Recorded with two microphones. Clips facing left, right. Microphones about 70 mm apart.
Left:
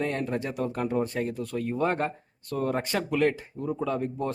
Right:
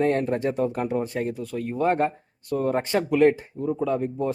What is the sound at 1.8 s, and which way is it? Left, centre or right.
Speech, right.